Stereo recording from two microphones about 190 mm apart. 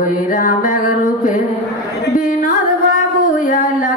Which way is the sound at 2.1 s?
40° left (ahead or behind).